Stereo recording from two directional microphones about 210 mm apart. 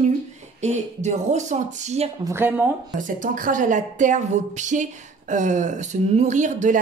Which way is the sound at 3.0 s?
40° right (ahead or behind).